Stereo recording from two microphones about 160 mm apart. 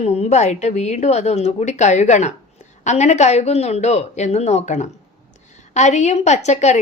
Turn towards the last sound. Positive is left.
turn(degrees=45)  # may be behind; listen again after turning